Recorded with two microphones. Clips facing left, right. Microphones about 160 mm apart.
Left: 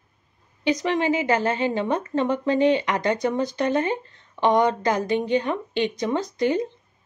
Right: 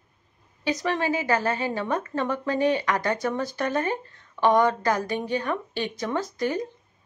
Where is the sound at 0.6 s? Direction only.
20° left (ahead or behind).